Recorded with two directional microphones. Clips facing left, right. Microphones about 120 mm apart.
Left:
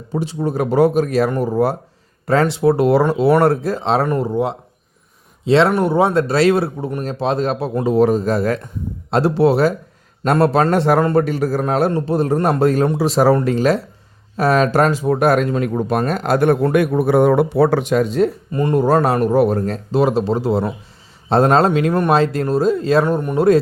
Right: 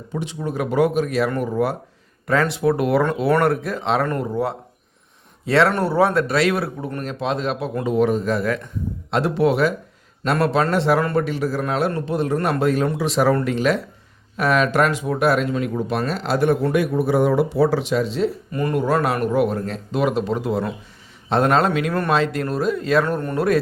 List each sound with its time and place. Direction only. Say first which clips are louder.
0.1 s a man's voice: left 6 dB; 35° left (ahead or behind)
18.5 s a man's voice: left 6 dB; 30° left (ahead or behind)